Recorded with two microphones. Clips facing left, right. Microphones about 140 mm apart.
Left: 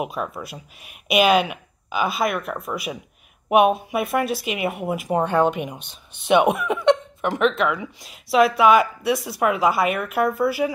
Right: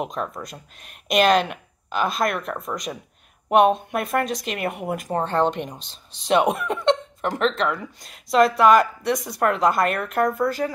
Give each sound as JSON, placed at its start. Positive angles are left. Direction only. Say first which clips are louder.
{"t": 0.0, "sound": "speech", "louder": "left 1 dB", "side_deg": 5}
{"t": 5.8, "sound": "speech", "louder": "left 2 dB", "side_deg": 60}
{"t": 6.2, "sound": "speech", "louder": "left 2 dB", "side_deg": 0}